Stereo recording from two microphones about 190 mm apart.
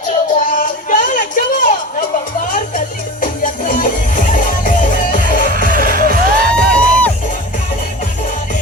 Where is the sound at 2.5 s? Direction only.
45° left (ahead or behind).